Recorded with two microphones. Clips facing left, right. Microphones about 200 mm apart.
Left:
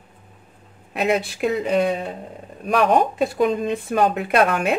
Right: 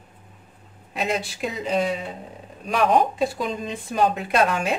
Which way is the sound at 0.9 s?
60° left (ahead or behind).